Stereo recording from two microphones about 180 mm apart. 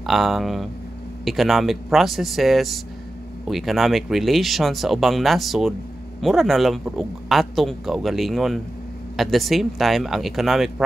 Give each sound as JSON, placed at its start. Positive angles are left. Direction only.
{"t": 0.0, "sound": "a man's voice", "side_deg": 0}